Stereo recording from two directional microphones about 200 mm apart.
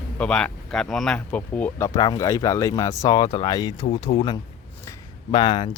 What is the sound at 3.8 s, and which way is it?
Speech, 35° left (ahead or behind).